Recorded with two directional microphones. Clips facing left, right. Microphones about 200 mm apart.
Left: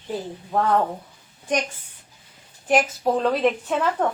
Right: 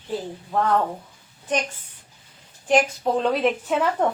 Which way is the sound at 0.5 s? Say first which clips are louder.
Left 1 dB; 15° left (ahead or behind).